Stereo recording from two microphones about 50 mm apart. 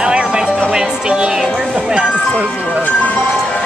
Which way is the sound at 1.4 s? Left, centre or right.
Centre.